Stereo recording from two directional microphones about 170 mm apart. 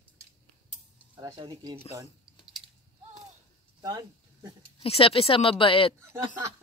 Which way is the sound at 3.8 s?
25° right (ahead or behind).